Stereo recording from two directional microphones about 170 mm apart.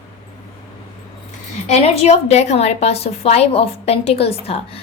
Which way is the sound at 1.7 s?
40° left (ahead or behind).